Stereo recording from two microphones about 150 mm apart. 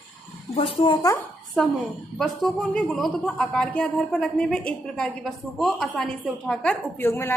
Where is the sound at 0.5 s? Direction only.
35° left (ahead or behind).